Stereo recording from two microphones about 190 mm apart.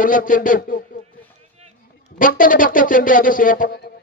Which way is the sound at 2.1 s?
45° left (ahead or behind).